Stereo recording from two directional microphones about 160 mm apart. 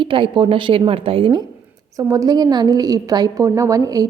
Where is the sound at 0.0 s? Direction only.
30° right (ahead or behind).